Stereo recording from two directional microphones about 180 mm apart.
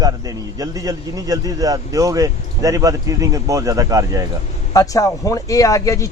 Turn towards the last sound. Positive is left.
turn(degrees=20)  # may be behind; listen again after turning